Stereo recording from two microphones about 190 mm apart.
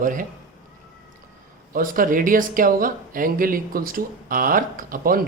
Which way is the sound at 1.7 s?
45° right (ahead or behind).